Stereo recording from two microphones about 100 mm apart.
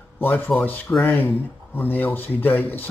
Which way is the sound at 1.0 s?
20° left (ahead or behind).